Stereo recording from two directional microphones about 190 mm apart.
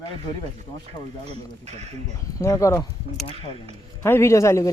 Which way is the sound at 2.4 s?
15° left (ahead or behind).